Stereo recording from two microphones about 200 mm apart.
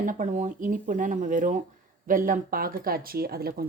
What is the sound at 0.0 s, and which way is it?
Speech, 40° right (ahead or behind).